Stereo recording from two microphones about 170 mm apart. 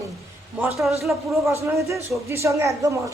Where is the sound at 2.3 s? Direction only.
15° right (ahead or behind).